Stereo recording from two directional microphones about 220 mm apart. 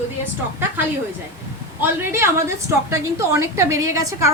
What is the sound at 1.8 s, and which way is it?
A woman's voice, 10° right (ahead or behind).